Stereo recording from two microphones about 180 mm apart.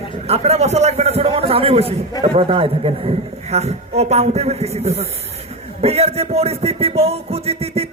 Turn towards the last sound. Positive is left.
turn(degrees=-35)  # may be behind; listen again after turning